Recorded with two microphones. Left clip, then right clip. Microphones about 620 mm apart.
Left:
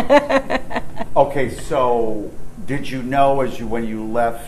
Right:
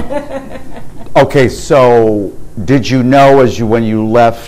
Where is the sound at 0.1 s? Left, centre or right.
Left.